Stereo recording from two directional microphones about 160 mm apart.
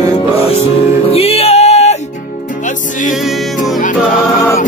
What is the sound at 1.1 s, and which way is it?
Music, 40° left (ahead or behind).